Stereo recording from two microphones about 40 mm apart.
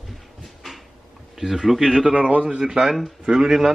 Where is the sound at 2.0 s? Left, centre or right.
Right.